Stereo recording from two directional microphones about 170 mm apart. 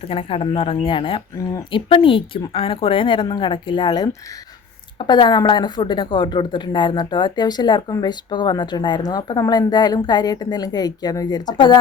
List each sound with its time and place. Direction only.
0.0 s speech: 35° left (ahead or behind)